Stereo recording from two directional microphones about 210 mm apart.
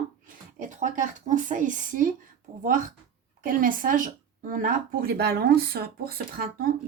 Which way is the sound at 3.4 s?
40° right (ahead or behind).